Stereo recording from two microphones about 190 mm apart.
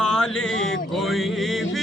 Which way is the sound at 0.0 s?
5° left (ahead or behind).